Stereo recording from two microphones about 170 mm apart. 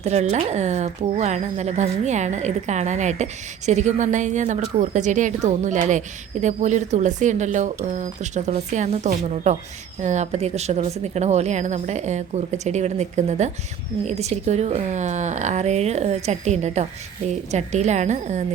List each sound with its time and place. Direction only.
0.0 s speech: 40° right (ahead or behind)